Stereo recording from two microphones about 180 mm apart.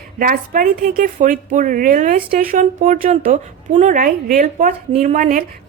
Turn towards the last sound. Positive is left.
turn(degrees=-45)  # may be behind; listen again after turning